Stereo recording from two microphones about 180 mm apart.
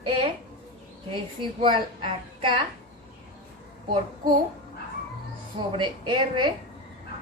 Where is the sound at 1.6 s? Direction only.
30° right (ahead or behind).